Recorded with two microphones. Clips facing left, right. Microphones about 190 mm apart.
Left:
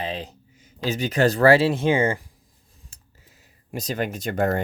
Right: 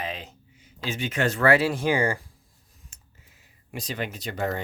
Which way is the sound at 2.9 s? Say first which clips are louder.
Left 2 dB; 35° left (ahead or behind).